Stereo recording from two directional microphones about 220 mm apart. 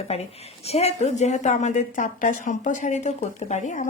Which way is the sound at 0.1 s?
30° left (ahead or behind).